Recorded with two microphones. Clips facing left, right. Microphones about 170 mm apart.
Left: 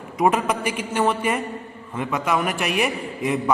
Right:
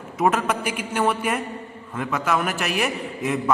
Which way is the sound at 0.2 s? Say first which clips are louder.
Left 1 dB; centre (ahead or behind).